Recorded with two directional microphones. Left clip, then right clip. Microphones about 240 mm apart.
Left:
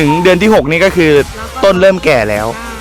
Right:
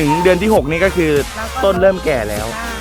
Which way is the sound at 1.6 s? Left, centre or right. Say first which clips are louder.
Left 5 dB; left.